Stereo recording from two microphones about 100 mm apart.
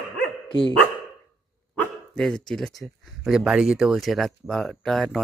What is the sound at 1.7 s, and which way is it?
Speech, 5° left (ahead or behind).